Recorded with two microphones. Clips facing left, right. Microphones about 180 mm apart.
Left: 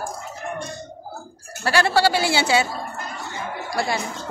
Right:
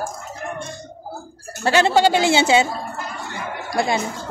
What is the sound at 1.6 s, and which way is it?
A woman's voice, 20° right (ahead or behind).